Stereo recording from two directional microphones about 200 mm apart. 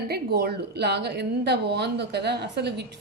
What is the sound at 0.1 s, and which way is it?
A woman's voice, 50° right (ahead or behind).